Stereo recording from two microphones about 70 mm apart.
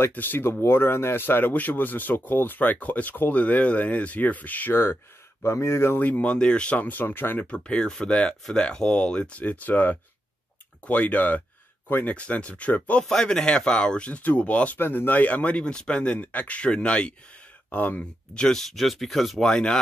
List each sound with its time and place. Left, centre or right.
0.1 s speech: left
5.9 s speech: left
7.4 s speech: centre
13.0 s speech: centre
18.3 s speech: centre
19.5 s speech: centre